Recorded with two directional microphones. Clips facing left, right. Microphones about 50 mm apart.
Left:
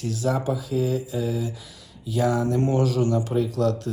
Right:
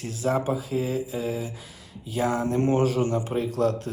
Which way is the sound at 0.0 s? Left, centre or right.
Right.